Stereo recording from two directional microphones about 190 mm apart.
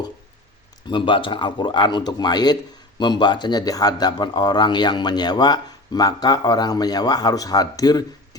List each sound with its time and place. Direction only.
0.9 s speech: 25° left (ahead or behind)